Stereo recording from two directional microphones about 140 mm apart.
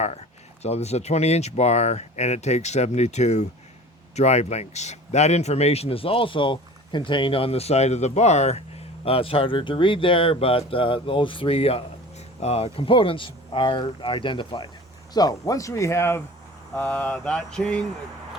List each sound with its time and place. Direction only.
0.6 s speech: 50° left (ahead or behind)
15.1 s speech: 25° left (ahead or behind)
16.7 s mantra: 10° left (ahead or behind)